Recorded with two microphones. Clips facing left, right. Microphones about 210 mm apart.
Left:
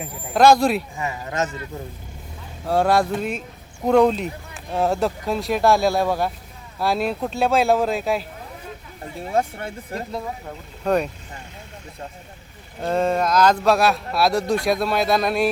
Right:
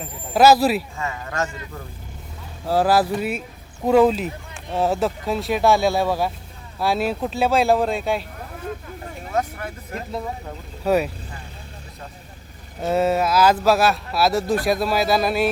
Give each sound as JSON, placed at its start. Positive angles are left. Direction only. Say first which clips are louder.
{"t": 0.3, "sound": "speech", "louder": "even", "side_deg": -5}
{"t": 0.9, "sound": "speech", "louder": "left 1 dB", "side_deg": 20}
{"t": 2.6, "sound": "speech", "louder": "even", "side_deg": 0}
{"t": 9.3, "sound": "speech", "louder": "left 2 dB", "side_deg": 30}
{"t": 10.8, "sound": "speech", "louder": "right 1 dB", "side_deg": -5}
{"t": 12.8, "sound": "speech", "louder": "right 1 dB", "side_deg": -5}